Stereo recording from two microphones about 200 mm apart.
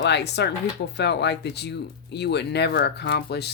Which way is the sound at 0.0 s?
55° left (ahead or behind).